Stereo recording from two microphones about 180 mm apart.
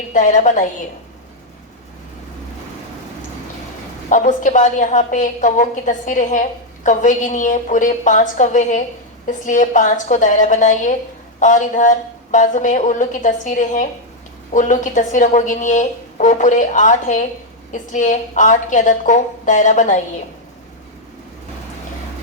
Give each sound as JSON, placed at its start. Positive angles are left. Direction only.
{"t": 0.1, "sound": "a woman's voice", "side_deg": 45}
{"t": 4.1, "sound": "a woman's voice", "side_deg": 45}